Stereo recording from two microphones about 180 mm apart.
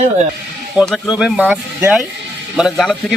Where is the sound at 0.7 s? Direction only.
Centre (ahead or behind).